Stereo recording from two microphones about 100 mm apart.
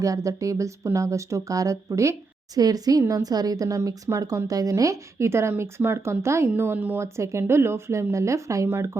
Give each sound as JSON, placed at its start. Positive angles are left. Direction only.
{"t": 0.0, "sound": "a woman's voice", "side_deg": -35}